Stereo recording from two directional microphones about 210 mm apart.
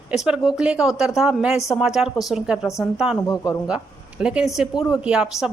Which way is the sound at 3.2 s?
15° left (ahead or behind).